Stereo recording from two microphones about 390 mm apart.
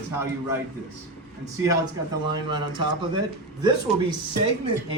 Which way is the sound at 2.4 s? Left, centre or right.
Centre.